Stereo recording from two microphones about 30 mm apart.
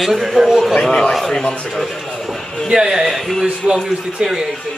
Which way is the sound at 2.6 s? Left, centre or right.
Right.